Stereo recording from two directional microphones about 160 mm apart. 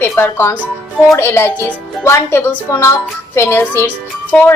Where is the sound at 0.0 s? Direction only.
15° left (ahead or behind).